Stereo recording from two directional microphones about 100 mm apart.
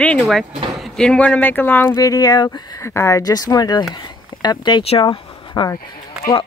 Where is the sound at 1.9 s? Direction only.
40° left (ahead or behind).